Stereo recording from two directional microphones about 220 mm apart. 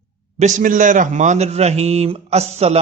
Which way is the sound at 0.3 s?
35° right (ahead or behind).